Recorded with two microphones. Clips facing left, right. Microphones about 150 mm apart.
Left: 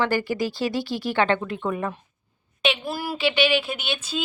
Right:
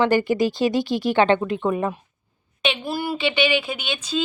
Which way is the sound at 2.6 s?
Centre (ahead or behind).